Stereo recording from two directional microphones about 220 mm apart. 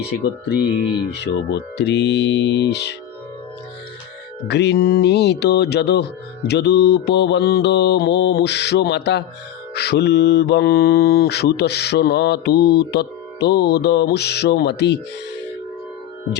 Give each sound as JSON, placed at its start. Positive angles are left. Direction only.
{"t": 0.1, "sound": "mantra", "side_deg": 45}
{"t": 4.4, "sound": "mantra", "side_deg": 50}